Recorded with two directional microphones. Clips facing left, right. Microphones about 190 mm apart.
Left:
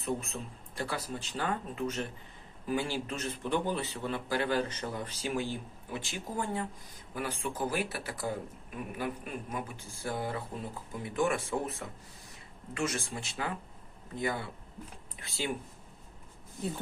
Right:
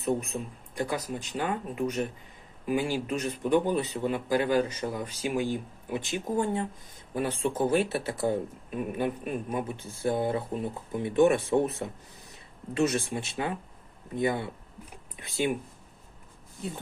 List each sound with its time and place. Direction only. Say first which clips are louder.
0.0 s a man's voice: right 6 dB; 15° right (ahead or behind)
12.7 s speech: right 8 dB; 25° right (ahead or behind)